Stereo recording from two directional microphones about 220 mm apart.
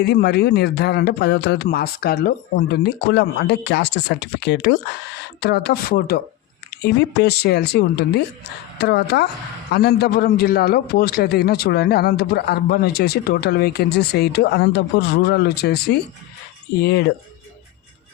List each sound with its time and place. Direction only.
0.0 s a man's voice: 45° left (ahead or behind)